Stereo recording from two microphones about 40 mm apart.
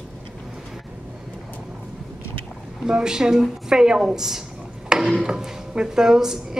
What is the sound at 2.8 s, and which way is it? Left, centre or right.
A woman's voice, centre.